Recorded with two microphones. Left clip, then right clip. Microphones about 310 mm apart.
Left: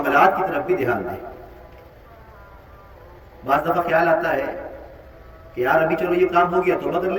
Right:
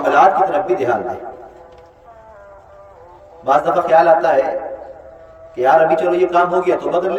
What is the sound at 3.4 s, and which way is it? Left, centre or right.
Speech, right.